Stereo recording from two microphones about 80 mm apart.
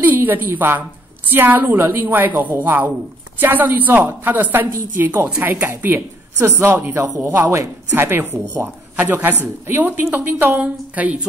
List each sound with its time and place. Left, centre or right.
0.0 s a woman's voice: right